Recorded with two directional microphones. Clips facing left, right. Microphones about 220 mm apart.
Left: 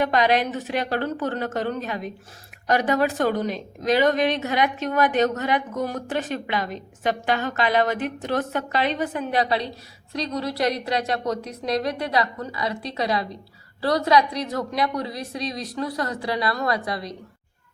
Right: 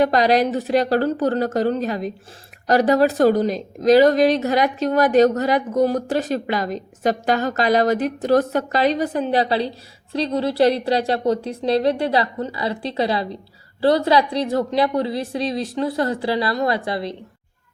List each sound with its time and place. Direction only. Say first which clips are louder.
0.0 s a woman's voice: right 4 dB; 35° right (ahead or behind)